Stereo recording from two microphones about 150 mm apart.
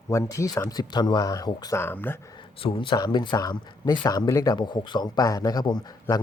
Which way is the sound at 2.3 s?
35° left (ahead or behind).